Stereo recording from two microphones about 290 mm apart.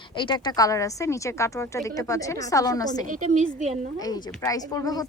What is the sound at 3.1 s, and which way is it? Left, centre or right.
Speech, right.